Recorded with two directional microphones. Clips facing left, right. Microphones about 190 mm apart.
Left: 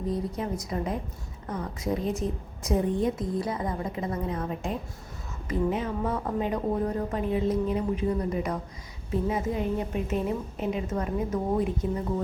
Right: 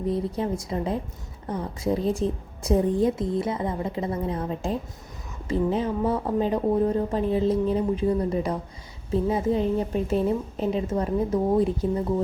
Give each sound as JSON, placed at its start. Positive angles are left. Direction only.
{"t": 0.1, "sound": "a woman's voice", "side_deg": -30}